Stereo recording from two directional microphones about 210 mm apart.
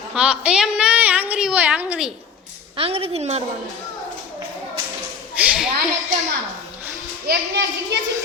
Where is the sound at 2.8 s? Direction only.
25° right (ahead or behind).